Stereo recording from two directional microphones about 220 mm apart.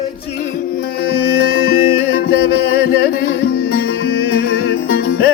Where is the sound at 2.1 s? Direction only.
40° left (ahead or behind).